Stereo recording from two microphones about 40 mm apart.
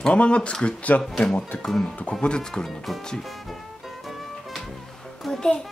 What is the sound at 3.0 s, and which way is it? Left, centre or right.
Speech, centre.